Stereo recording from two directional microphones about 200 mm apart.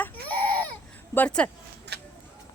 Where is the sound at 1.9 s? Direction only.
55° right (ahead or behind).